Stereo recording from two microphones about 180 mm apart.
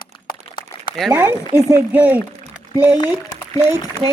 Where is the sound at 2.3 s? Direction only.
35° right (ahead or behind).